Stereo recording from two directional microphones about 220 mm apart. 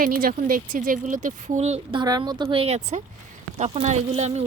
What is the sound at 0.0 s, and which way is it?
Speech, 40° right (ahead or behind).